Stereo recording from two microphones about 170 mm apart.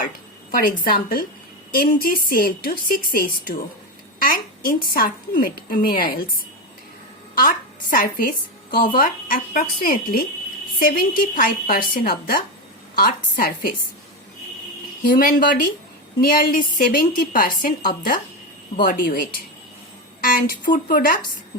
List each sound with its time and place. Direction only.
0.6 s a woman's voice: 60° left (ahead or behind)
7.3 s a woman's voice: 55° left (ahead or behind)
15.1 s a woman's voice: 55° left (ahead or behind)